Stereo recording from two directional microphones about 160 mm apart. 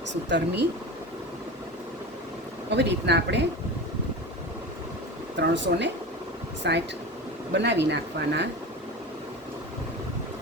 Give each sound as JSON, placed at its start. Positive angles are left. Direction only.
{"t": 0.1, "sound": "speech", "side_deg": -90}
{"t": 2.6, "sound": "speech", "side_deg": -90}
{"t": 5.4, "sound": "speech", "side_deg": -90}